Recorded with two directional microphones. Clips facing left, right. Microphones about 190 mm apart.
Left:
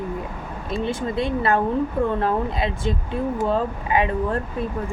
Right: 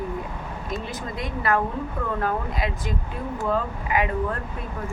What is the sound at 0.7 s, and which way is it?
A woman's voice, 30° left (ahead or behind).